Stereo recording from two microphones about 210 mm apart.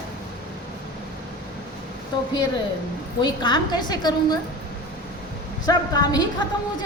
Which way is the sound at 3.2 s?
20° left (ahead or behind).